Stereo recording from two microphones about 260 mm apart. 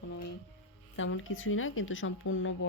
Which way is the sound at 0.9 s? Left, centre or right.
Left.